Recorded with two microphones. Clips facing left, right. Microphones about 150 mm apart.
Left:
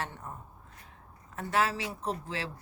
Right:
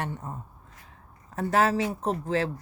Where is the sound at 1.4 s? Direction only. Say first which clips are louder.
Right 6 dB; 40° right (ahead or behind).